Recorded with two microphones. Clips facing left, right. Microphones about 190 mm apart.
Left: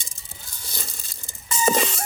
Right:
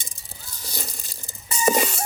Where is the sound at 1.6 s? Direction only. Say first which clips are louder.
Right 1 dB; 10° right (ahead or behind).